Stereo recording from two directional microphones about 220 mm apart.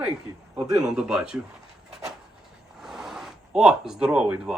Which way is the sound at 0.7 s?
5° right (ahead or behind).